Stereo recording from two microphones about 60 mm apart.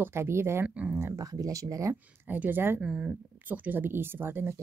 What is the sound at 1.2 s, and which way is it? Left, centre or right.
Speech, right.